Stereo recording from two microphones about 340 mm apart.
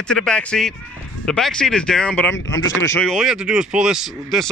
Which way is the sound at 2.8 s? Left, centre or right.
Centre.